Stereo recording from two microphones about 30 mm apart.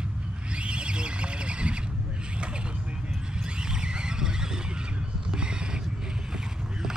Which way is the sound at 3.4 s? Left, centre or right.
Right.